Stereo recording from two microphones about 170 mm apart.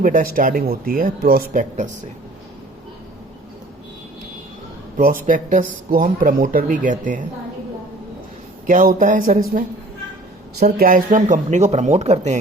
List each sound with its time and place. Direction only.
0.0 s speech: 55° right (ahead or behind)
4.9 s speech: 55° right (ahead or behind)
8.6 s speech: 50° right (ahead or behind)